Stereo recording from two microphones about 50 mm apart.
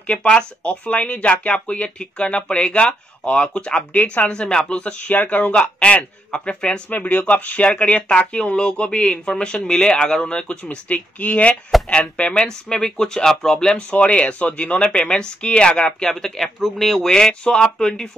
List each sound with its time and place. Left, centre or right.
0.0 s speech: left
4.3 s speech: centre
5.1 s speech: left
6.9 s speech: left; by 17.1 s centre
17.1 s speech: centre